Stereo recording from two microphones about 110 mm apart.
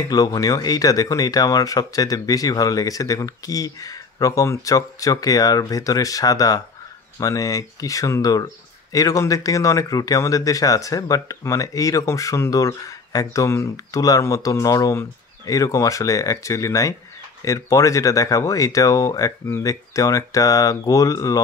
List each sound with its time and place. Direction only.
0.1 s speech: 35° left (ahead or behind)